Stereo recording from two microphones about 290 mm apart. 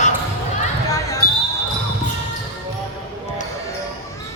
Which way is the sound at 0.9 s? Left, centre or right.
Centre.